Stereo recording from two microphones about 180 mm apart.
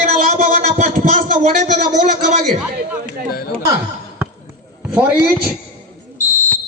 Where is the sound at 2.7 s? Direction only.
60° right (ahead or behind).